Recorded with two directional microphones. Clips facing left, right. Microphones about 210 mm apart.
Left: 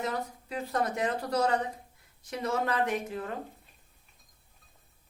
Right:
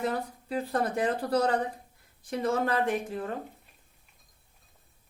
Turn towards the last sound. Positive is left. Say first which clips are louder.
# right 2 dB
turn(degrees=-30)  # may be behind; listen again after turning